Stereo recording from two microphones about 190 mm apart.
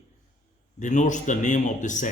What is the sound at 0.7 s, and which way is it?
A man's voice, 40° left (ahead or behind).